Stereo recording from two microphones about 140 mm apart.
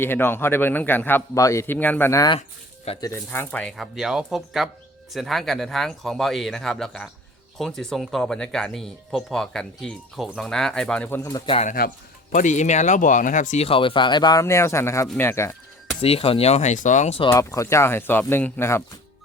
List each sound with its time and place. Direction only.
0.0 s a man's voice: 15° left (ahead or behind)
3.8 s speech: centre (ahead or behind); by 11.4 s 20° left (ahead or behind)
12.3 s speech: 60° left (ahead or behind)
13.7 s speech: 40° left (ahead or behind)
14.4 s a man's voice: 20° left (ahead or behind)
16.0 s speech: 45° left (ahead or behind)
17.3 s a man's voice: 20° left (ahead or behind)